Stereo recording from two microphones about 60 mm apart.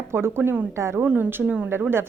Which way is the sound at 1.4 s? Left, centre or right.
Centre.